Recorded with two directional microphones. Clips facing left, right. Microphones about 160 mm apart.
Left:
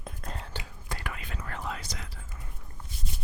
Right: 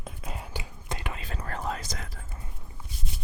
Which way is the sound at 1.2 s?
35° right (ahead or behind).